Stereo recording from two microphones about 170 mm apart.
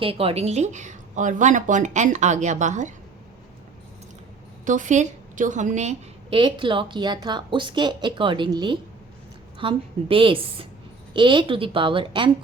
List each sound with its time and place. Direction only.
0.0 s a woman's voice: 35° right (ahead or behind)
4.6 s a woman's voice: 50° right (ahead or behind)
6.4 s a woman's voice: 30° right (ahead or behind)